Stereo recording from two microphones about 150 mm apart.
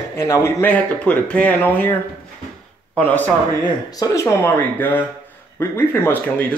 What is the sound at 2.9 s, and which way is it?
Speech, 10° left (ahead or behind).